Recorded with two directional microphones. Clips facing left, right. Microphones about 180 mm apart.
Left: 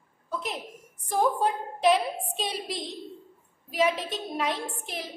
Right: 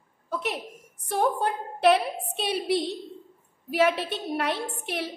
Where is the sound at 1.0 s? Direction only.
65° right (ahead or behind).